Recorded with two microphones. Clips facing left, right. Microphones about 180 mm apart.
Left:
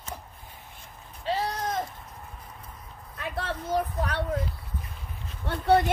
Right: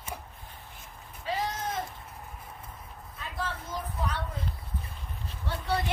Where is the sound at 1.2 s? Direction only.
30° left (ahead or behind).